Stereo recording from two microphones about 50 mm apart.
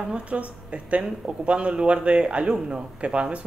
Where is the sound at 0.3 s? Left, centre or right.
Right.